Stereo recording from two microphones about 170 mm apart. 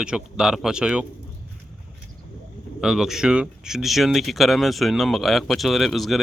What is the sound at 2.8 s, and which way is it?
Speech, centre (ahead or behind).